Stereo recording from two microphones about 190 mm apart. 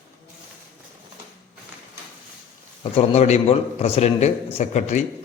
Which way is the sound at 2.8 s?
30° left (ahead or behind).